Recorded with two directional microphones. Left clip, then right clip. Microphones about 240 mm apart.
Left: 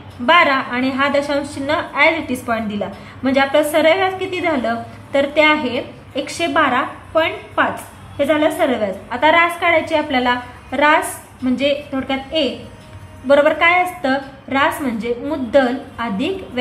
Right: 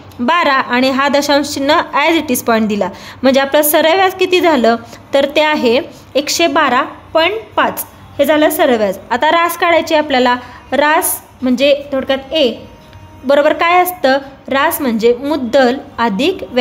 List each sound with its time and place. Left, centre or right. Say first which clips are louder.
0.3 s a woman's voice: right 1 dB; right